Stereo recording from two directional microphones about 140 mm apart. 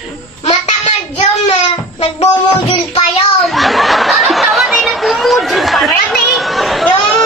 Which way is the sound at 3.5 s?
Centre (ahead or behind).